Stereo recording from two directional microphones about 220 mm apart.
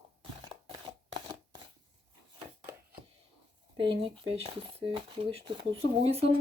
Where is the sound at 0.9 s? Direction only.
20° right (ahead or behind).